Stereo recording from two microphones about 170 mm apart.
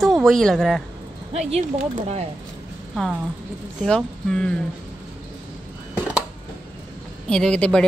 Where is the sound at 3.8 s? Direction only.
5° left (ahead or behind).